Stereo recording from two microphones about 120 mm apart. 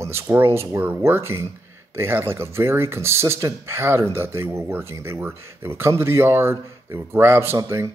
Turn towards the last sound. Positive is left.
turn(degrees=-20)  # may be behind; listen again after turning